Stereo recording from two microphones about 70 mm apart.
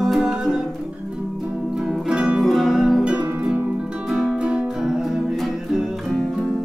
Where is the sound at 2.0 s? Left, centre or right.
Centre.